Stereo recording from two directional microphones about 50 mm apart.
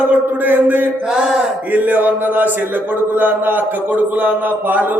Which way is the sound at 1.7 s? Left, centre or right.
Right.